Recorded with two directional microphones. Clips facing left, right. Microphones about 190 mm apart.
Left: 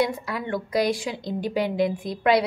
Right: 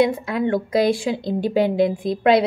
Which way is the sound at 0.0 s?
25° right (ahead or behind).